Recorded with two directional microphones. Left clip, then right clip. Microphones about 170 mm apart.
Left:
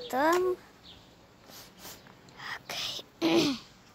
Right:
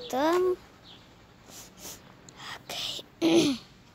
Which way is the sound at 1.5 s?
20° right (ahead or behind).